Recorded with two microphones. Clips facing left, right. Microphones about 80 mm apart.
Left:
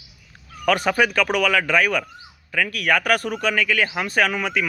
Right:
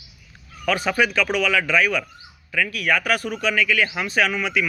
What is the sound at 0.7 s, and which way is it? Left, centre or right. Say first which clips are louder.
A man's voice: left 2 dB; left.